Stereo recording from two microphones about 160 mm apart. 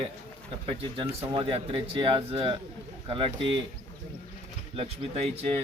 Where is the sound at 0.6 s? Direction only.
35° right (ahead or behind).